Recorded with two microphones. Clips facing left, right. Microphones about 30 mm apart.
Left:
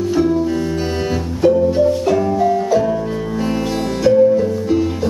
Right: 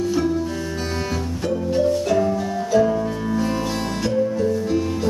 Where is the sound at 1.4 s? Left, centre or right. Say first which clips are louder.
Left 8 dB; centre.